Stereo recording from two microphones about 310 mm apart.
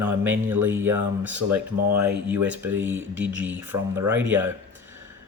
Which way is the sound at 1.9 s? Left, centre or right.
Right.